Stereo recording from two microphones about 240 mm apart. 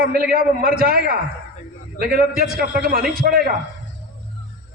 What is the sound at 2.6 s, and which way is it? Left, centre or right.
Speech, right.